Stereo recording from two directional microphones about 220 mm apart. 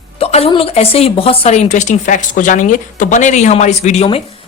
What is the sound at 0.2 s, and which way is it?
A woman's voice, 25° left (ahead or behind).